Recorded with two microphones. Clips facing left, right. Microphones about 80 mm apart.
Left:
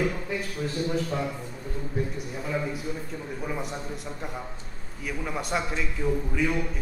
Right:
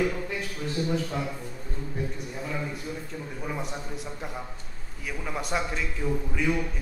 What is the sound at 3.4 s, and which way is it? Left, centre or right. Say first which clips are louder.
A man's voice: left 1 dB; centre.